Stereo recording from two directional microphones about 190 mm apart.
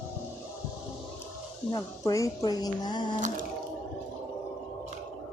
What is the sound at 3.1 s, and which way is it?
Water, 40° right (ahead or behind).